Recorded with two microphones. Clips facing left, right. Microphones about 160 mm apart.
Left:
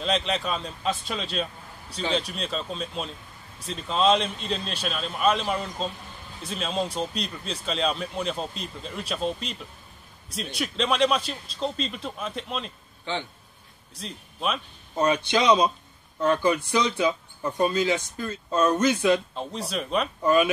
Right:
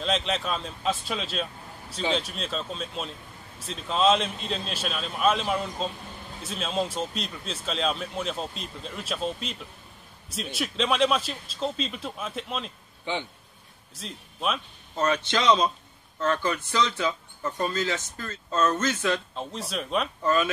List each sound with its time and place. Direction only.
0.0 s a man's voice: centre (ahead or behind)
13.0 s speech: 15° right (ahead or behind)
13.9 s a man's voice: centre (ahead or behind)
15.0 s speech: 15° left (ahead or behind)
19.3 s a man's voice: centre (ahead or behind)